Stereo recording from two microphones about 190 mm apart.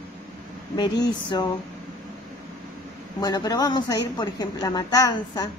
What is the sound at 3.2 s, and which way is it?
Speech, 20° left (ahead or behind).